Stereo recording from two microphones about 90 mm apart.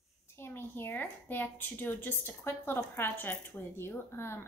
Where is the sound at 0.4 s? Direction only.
25° left (ahead or behind).